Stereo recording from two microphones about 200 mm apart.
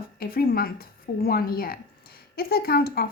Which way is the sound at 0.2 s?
45° left (ahead or behind).